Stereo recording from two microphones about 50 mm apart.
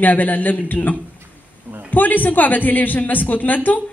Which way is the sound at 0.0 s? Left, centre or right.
Left.